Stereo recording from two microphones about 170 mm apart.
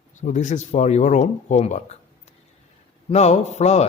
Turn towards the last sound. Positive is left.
turn(degrees=40)  # may be behind; listen again after turning